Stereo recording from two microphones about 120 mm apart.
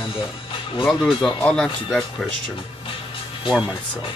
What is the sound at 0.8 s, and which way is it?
Speech, centre (ahead or behind).